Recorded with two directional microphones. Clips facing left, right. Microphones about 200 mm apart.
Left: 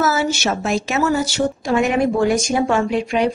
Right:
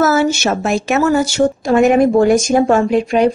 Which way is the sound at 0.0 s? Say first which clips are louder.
Right 5 dB; 50° right (ahead or behind).